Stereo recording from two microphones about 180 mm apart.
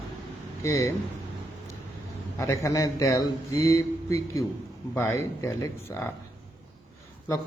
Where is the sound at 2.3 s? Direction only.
15° left (ahead or behind).